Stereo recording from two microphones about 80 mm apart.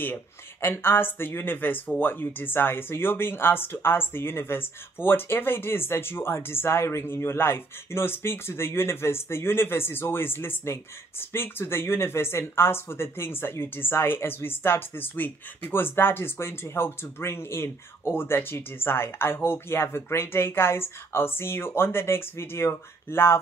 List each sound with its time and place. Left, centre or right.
0.0 s speech: left